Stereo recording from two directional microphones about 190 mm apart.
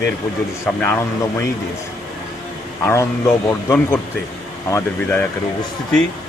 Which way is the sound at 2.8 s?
15° left (ahead or behind).